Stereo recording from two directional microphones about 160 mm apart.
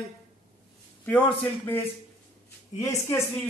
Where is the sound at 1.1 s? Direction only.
10° left (ahead or behind).